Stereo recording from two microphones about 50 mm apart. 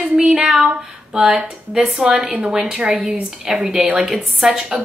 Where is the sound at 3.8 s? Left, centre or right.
Right.